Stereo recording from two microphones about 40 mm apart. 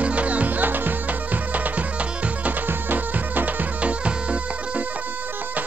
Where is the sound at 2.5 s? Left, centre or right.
Right.